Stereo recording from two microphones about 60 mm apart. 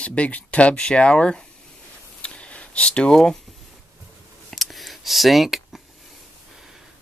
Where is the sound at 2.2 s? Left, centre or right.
Centre.